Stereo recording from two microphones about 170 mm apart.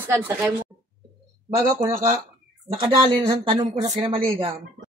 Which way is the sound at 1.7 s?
45° right (ahead or behind).